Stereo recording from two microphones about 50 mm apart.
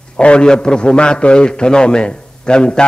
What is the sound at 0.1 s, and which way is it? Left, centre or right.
A man's voice, left.